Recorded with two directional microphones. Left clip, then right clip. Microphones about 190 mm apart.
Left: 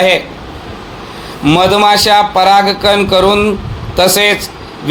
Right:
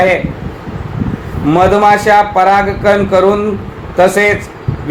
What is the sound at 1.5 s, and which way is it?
A man's voice, 35° left (ahead or behind).